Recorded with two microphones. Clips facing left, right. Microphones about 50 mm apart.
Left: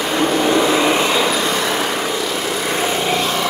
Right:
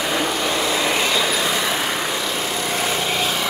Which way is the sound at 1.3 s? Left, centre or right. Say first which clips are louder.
Left 3 dB; centre.